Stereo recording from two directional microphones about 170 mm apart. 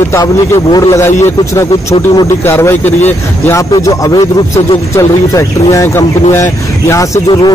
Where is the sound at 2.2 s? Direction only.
15° left (ahead or behind).